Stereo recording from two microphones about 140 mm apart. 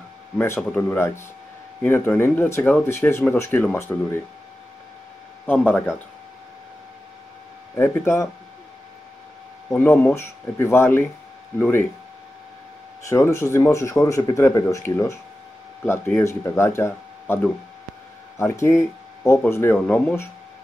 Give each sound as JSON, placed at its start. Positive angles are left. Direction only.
{"t": 0.6, "sound": "speech", "side_deg": 10}
{"t": 5.5, "sound": "speech", "side_deg": 10}
{"t": 7.7, "sound": "speech", "side_deg": 15}
{"t": 9.7, "sound": "speech", "side_deg": 15}
{"t": 13.0, "sound": "speech", "side_deg": 20}
{"t": 16.2, "sound": "speech", "side_deg": 20}
{"t": 18.4, "sound": "speech", "side_deg": 20}